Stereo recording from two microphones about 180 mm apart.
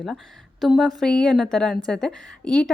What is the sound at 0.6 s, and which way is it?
A woman's voice, centre (ahead or behind).